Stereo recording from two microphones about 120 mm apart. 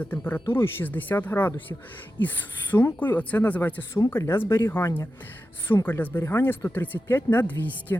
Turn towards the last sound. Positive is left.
turn(degrees=15)  # may be behind; listen again after turning